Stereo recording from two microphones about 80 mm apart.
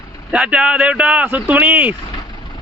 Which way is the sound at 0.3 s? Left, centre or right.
Centre.